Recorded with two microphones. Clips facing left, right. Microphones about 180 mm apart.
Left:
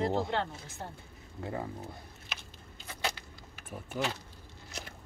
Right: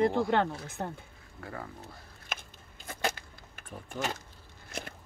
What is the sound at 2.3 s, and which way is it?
Biting, 50° right (ahead or behind).